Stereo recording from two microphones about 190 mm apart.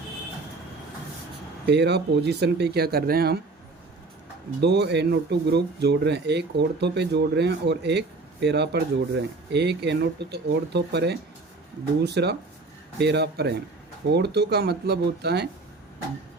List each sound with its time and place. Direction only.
1.6 s speech: 60° right (ahead or behind)
4.6 s speech: 60° right (ahead or behind)